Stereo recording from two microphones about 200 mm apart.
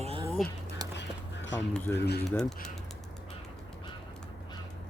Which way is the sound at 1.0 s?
65° left (ahead or behind).